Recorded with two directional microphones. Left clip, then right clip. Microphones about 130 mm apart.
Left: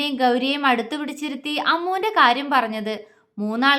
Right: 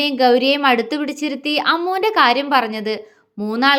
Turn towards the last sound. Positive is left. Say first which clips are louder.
# right 3 dB
turn(degrees=-20)  # may be behind; listen again after turning